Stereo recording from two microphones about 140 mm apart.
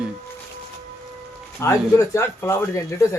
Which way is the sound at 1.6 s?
20° left (ahead or behind).